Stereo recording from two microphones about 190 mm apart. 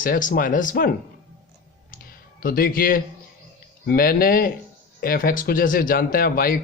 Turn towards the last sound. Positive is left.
turn(degrees=50)  # may be behind; listen again after turning